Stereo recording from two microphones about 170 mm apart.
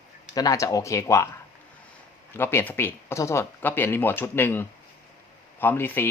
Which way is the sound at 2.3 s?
15° left (ahead or behind).